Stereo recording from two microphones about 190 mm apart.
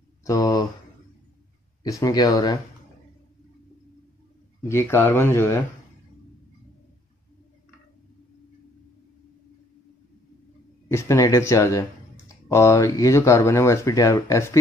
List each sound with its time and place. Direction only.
0.2 s speech: 20° left (ahead or behind)
1.8 s speech: 15° left (ahead or behind)
4.6 s speech: 15° left (ahead or behind)
10.9 s speech: 15° left (ahead or behind)